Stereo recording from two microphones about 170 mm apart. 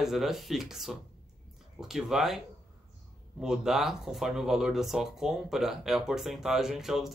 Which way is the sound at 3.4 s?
5° right (ahead or behind).